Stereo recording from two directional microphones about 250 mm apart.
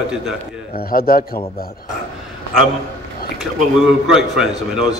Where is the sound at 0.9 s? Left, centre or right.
Left.